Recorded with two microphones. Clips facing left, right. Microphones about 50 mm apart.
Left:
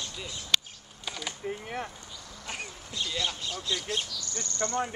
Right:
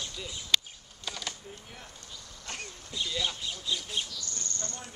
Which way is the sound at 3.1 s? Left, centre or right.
Centre.